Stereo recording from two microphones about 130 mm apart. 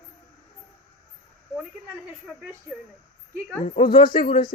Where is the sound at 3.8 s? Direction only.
40° left (ahead or behind).